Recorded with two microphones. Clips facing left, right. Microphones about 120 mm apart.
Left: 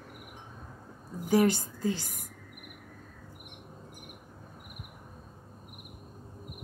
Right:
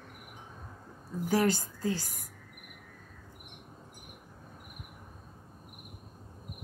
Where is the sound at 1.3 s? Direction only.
20° left (ahead or behind).